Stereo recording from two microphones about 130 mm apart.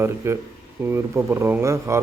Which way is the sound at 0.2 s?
20° right (ahead or behind).